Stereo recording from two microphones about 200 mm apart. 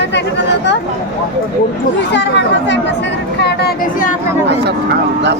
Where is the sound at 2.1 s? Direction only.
60° left (ahead or behind).